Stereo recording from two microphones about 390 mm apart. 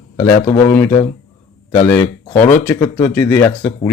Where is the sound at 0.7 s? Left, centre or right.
Centre.